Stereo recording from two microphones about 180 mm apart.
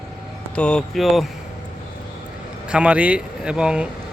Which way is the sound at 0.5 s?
5° left (ahead or behind).